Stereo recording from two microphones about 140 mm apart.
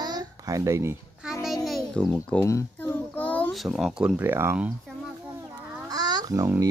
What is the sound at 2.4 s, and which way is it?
Child singing, 20° left (ahead or behind).